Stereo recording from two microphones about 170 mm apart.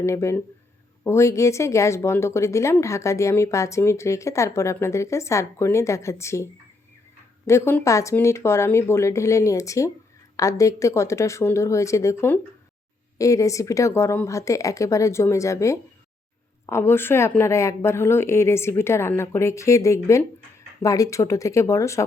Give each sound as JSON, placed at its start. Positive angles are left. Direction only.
{"t": 0.0, "sound": "a woman's voice", "side_deg": 15}